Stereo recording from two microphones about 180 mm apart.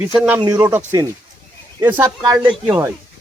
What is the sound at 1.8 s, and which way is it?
Speech, 15° right (ahead or behind).